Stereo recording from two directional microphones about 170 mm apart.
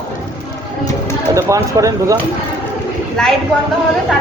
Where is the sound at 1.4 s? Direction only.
20° right (ahead or behind).